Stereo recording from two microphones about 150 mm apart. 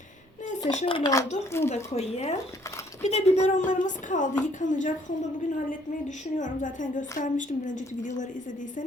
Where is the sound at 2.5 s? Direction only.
20° left (ahead or behind).